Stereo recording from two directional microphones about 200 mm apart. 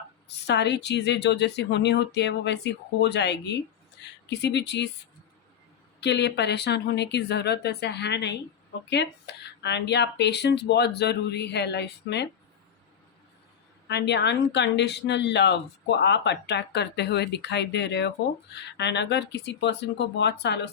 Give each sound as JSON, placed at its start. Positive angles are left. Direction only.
{"t": 0.4, "sound": "speech", "side_deg": 60}
{"t": 6.0, "sound": "speech", "side_deg": 60}
{"t": 13.8, "sound": "speech", "side_deg": 60}